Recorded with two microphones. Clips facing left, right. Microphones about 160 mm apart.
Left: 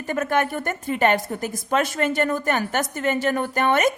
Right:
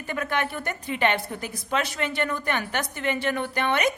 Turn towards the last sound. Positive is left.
turn(degrees=45)  # may be behind; listen again after turning